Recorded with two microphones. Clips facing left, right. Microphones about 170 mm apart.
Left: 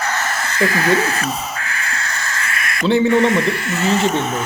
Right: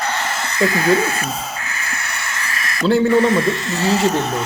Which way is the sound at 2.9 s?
Centre (ahead or behind).